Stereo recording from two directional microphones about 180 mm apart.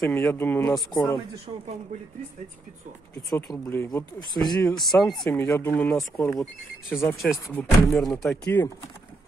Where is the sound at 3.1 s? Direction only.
15° left (ahead or behind).